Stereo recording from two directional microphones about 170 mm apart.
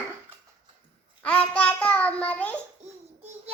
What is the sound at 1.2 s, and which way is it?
A child's voice, 10° left (ahead or behind).